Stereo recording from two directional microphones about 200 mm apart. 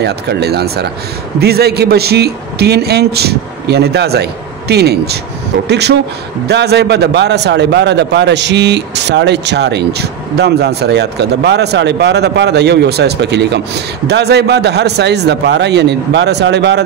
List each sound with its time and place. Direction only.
0.0 s a man's voice: 55° right (ahead or behind)